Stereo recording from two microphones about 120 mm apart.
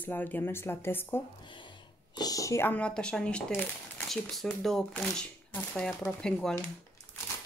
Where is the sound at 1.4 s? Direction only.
40° left (ahead or behind); by 2.7 s 25° left (ahead or behind).